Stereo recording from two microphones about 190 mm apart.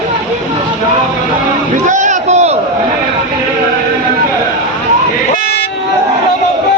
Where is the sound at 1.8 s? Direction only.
40° right (ahead or behind).